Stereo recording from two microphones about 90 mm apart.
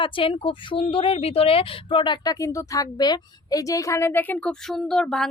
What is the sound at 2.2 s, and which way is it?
A woman's voice, 35° left (ahead or behind).